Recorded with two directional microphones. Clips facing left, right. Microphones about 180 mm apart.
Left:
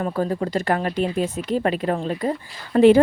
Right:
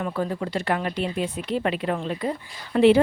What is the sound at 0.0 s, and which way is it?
Speech, 40° left (ahead or behind).